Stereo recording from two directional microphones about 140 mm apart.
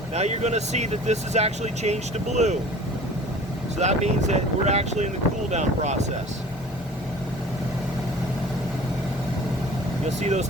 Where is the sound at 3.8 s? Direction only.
55° right (ahead or behind).